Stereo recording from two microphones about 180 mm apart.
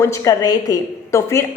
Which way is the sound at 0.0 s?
15° left (ahead or behind).